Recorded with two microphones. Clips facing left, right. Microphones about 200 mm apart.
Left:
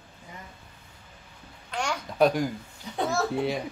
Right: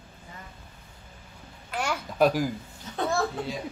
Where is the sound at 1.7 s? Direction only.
5° right (ahead or behind).